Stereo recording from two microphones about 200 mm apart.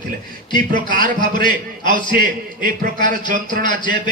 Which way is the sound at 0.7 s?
40° right (ahead or behind).